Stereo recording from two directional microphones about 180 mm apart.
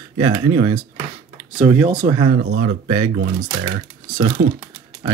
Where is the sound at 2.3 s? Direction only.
65° right (ahead or behind).